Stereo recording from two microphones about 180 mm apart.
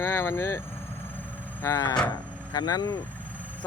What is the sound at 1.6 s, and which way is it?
Speech, 15° left (ahead or behind).